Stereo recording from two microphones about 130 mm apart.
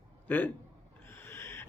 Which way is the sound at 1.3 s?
20° left (ahead or behind).